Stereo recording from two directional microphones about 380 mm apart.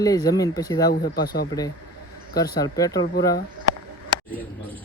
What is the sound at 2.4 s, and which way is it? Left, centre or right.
Speech, centre.